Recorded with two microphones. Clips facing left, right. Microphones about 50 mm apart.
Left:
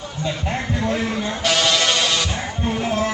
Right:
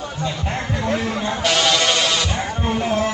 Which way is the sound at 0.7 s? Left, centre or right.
Centre.